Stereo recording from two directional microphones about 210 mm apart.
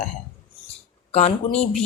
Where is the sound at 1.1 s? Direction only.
30° left (ahead or behind).